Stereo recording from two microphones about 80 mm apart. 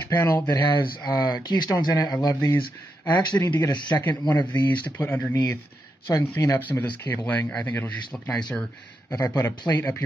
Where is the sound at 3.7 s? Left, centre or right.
Left.